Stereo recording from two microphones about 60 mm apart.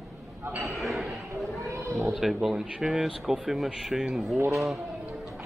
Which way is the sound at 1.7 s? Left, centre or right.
Right.